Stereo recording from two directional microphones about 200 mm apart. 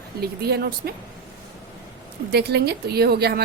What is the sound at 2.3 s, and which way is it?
A woman's voice, 55° right (ahead or behind).